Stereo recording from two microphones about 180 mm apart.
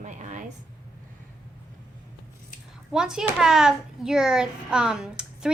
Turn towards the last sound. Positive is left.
turn(degrees=-5)  # may be behind; listen again after turning